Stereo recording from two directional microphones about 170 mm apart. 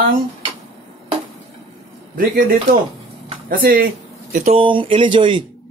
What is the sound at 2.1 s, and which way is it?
Speech, 55° right (ahead or behind).